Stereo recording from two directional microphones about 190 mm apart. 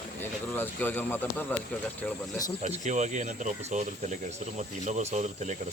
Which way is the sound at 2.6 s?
40° right (ahead or behind).